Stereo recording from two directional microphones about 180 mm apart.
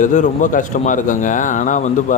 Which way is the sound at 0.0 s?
45° left (ahead or behind).